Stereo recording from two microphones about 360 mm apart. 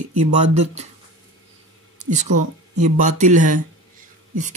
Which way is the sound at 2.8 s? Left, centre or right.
Centre.